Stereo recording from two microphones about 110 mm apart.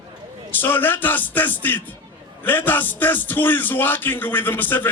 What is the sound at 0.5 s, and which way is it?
A man's voice, 15° left (ahead or behind).